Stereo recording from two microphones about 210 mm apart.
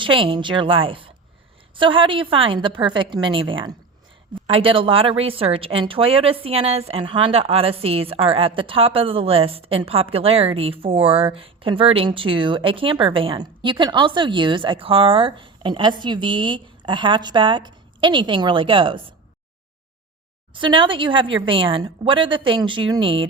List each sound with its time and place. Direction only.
0.0 s speech: 25° right (ahead or behind)
20.5 s speech: 25° right (ahead or behind)